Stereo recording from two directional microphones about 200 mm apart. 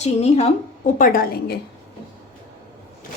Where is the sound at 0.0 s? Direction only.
30° left (ahead or behind).